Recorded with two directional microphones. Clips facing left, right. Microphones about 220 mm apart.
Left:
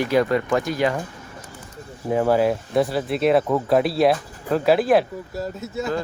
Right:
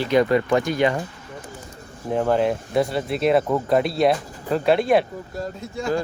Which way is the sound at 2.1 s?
5° left (ahead or behind).